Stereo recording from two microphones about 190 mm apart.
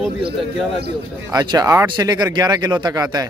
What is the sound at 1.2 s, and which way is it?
Speech, 20° right (ahead or behind).